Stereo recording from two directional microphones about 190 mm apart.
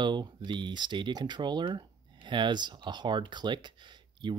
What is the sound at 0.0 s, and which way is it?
Speech, 25° right (ahead or behind).